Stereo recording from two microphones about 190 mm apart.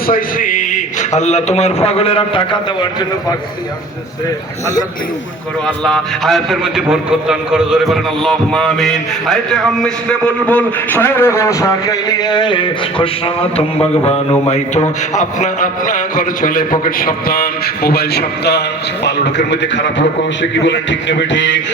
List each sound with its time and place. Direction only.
0.1 s a man's voice: 45° left (ahead or behind); by 2.6 s 30° left (ahead or behind)
5.6 s a man's voice: 5° left (ahead or behind); by 21.6 s 70° left (ahead or behind)